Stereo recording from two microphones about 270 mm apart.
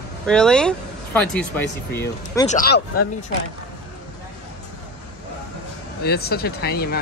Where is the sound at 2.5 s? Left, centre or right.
Left.